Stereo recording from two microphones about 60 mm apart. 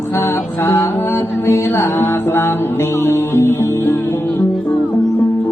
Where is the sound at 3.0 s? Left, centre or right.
Left.